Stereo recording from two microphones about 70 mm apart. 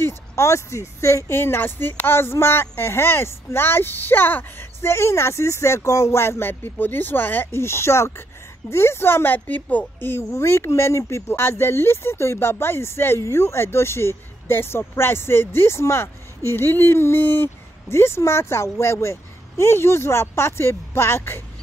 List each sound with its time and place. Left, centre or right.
0.0 s a woman's voice: left